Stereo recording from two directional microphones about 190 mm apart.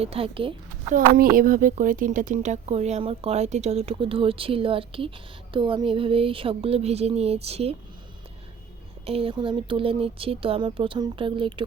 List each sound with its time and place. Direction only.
0.0 s speech: 30° right (ahead or behind)
0.9 s a woman's voice: 45° right (ahead or behind); by 7.8 s 30° right (ahead or behind)
9.0 s speech: 30° right (ahead or behind)